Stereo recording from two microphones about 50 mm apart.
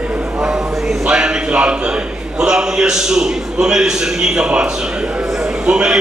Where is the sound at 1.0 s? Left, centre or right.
Centre.